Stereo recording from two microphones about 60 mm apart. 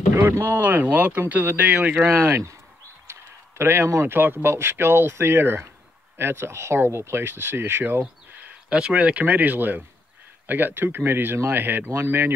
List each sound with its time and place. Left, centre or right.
0.1 s speech: right
0.6 s speech: right
1.7 s speech: right
2.0 s speech: right
8.6 s speech: centre; by 12.3 s right